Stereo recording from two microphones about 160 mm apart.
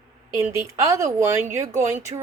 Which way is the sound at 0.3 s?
20° right (ahead or behind).